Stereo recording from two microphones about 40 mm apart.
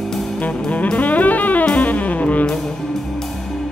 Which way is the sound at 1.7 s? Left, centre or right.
Left.